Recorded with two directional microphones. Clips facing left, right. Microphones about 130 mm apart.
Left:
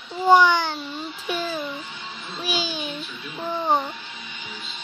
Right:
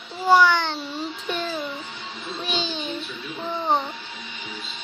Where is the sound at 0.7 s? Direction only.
5° left (ahead or behind).